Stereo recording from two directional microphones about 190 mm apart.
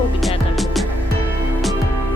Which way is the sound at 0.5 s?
Centre (ahead or behind).